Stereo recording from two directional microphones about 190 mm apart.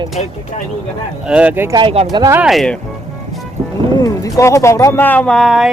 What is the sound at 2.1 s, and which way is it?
Speech, 20° right (ahead or behind).